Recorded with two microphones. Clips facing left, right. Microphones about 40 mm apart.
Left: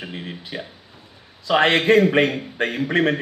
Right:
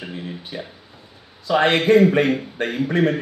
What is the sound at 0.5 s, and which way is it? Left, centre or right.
A man's voice, left.